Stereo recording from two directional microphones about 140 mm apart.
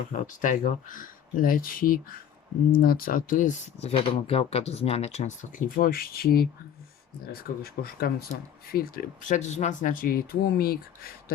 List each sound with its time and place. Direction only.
0.1 s speech: 65° left (ahead or behind)
3.8 s speech: 45° left (ahead or behind); by 11.1 s 90° left